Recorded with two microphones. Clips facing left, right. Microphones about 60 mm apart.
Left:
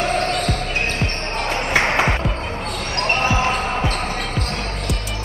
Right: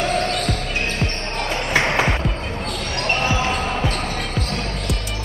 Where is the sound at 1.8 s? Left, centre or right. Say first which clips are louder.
Left 1 dB; left.